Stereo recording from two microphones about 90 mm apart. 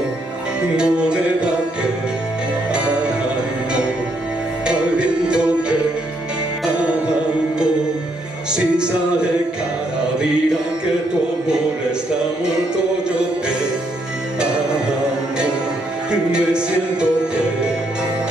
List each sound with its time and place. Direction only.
0.7 s music: 10° right (ahead or behind)
2.7 s music: 10° right (ahead or behind)
4.6 s music: 10° right (ahead or behind)
8.5 s music: 10° right (ahead or behind)
16.1 s music: 10° right (ahead or behind)